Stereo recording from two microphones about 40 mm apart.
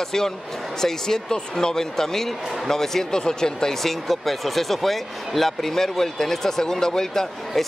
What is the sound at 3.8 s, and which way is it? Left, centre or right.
Speech, centre.